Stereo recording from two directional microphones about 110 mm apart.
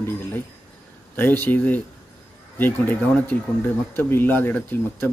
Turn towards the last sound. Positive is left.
turn(degrees=15)  # may be behind; listen again after turning